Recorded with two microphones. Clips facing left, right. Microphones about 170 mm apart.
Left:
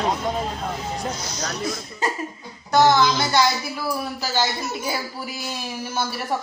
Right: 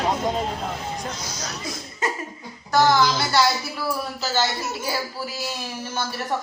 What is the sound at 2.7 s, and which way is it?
Speech, 20° left (ahead or behind).